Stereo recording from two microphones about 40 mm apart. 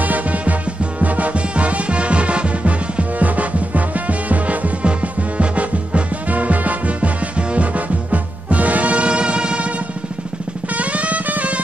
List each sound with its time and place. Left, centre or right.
0.0 s music: right
10.7 s drum: right